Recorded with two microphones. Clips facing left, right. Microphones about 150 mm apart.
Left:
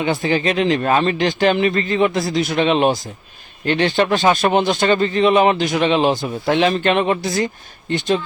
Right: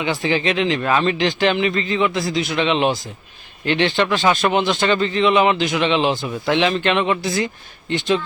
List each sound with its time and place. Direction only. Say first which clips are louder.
0.0 s a man's voice: left 2 dB; 45° left (ahead or behind)